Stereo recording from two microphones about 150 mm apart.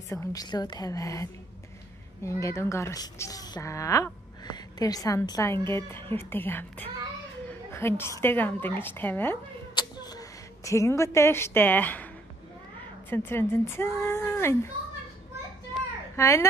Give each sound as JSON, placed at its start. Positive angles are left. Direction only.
{"t": 0.1, "sound": "speech", "side_deg": 20}
{"t": 9.8, "sound": "a woman's voice", "side_deg": 25}
{"t": 13.1, "sound": "speech", "side_deg": 15}
{"t": 16.2, "sound": "speech", "side_deg": 20}